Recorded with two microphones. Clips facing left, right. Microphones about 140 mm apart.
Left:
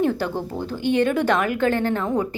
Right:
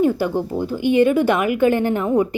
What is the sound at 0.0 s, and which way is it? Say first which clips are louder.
A woman's voice: right 4 dB; 10° right (ahead or behind).